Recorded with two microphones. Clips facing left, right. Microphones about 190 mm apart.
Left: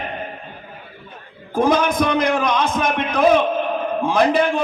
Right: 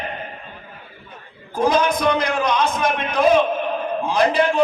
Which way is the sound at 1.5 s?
55° left (ahead or behind).